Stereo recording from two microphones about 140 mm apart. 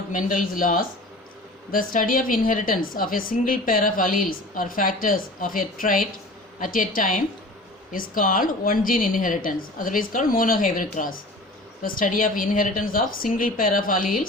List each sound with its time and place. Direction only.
0.1 s a woman's voice: 70° left (ahead or behind)
11.8 s a woman's voice: 80° left